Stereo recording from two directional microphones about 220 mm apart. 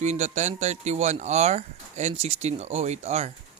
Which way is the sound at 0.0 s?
30° right (ahead or behind).